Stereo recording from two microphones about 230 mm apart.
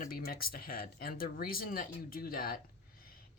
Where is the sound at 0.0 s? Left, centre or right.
Left.